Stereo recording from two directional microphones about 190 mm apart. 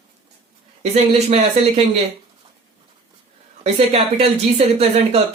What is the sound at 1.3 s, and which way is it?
Speech, 30° right (ahead or behind).